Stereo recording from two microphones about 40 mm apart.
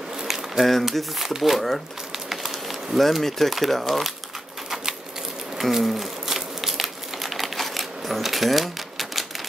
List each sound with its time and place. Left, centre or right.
0.2 s a sound: centre
0.9 s crumpling: centre
3.0 s speech: centre
5.6 s crumpling: centre